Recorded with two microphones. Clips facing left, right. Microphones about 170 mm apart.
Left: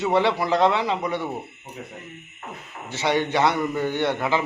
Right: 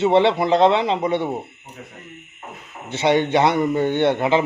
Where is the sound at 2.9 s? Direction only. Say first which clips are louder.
Right 5 dB; 20° right (ahead or behind).